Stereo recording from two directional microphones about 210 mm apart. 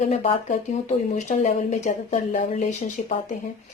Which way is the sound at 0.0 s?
30° left (ahead or behind).